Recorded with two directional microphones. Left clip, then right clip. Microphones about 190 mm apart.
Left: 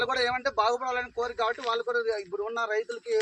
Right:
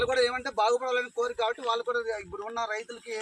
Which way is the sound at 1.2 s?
25° left (ahead or behind).